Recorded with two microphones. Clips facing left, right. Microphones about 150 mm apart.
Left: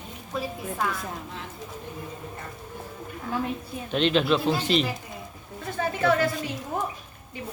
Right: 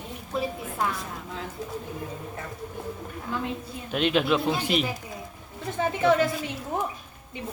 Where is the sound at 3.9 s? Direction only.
10° right (ahead or behind).